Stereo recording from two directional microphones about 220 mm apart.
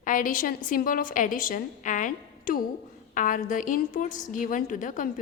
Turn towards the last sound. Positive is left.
turn(degrees=35)  # may be behind; listen again after turning